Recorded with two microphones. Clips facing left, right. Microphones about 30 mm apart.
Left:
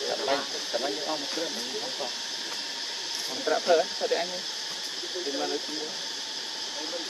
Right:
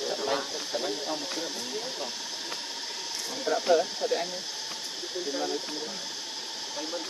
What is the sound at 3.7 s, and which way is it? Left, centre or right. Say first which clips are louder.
Speech: even; left.